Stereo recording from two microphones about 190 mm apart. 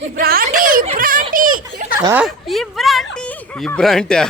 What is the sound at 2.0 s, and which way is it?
Speech, 10° right (ahead or behind).